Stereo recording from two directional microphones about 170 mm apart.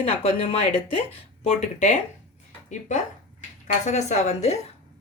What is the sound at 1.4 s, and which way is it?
Speech, 45° left (ahead or behind).